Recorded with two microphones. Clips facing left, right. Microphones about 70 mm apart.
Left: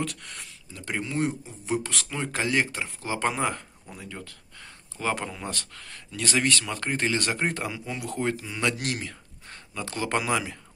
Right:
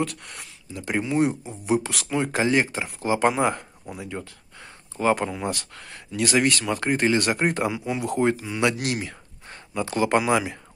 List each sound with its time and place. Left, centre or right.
0.0 s speech: centre
0.7 s speech: centre
3.0 s speech: centre